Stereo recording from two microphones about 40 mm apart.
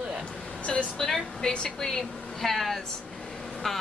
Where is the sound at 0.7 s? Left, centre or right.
Centre.